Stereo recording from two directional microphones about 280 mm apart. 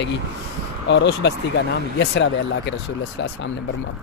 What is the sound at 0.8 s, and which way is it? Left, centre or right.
Speech, left.